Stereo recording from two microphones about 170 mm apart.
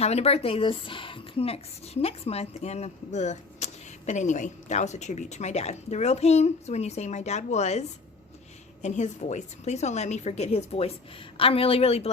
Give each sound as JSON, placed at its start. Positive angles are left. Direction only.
{"t": 0.0, "sound": "a woman's voice", "side_deg": 40}